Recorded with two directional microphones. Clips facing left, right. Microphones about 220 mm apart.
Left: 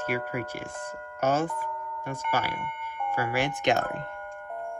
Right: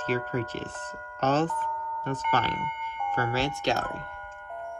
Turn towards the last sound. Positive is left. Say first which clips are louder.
# left 3 dB
turn(degrees=20)  # may be behind; listen again after turning